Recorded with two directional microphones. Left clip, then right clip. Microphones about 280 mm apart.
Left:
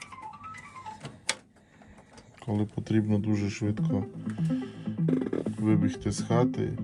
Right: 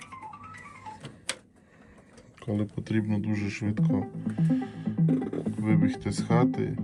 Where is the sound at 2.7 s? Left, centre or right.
Centre.